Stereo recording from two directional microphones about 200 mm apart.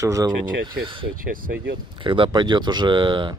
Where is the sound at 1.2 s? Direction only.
45° right (ahead or behind).